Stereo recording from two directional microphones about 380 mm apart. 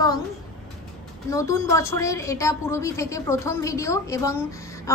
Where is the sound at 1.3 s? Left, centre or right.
Centre.